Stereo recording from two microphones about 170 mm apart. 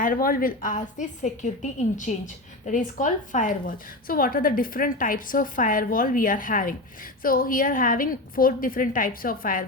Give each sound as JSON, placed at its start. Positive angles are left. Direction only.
{"t": 0.0, "sound": "a woman's voice", "side_deg": 55}